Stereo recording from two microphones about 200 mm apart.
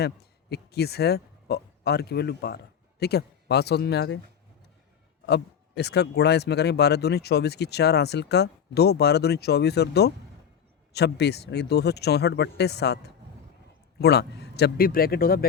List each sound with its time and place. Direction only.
0.0 s speech: 55° left (ahead or behind)
5.2 s speech: 55° left (ahead or behind)